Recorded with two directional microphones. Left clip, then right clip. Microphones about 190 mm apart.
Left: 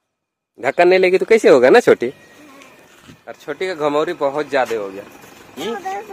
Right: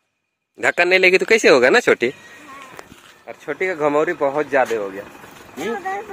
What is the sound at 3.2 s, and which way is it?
A man's voice, 5° left (ahead or behind).